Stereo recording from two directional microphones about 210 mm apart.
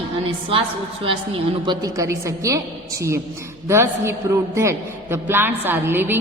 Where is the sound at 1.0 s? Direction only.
25° right (ahead or behind).